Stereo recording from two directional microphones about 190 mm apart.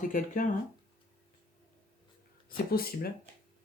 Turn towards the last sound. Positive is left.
turn(degrees=55)  # may be behind; listen again after turning